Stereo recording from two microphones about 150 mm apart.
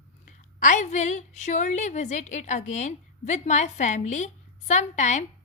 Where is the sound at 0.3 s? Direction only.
55° left (ahead or behind).